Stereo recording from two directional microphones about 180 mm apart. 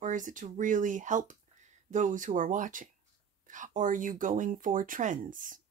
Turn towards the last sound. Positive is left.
turn(degrees=-45)  # may be behind; listen again after turning